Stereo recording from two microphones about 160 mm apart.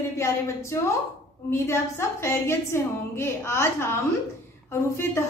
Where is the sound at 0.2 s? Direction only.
15° left (ahead or behind).